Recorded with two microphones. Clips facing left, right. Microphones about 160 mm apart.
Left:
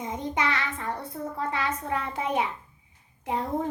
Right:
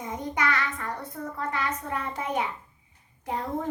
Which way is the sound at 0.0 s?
25° left (ahead or behind).